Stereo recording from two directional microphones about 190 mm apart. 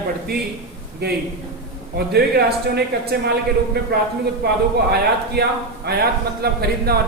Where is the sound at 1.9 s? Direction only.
55° right (ahead or behind).